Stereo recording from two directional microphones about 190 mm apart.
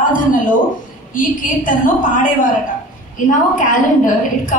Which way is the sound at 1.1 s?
45° left (ahead or behind).